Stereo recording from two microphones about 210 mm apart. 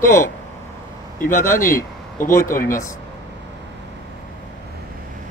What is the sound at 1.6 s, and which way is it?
Speech, 40° left (ahead or behind).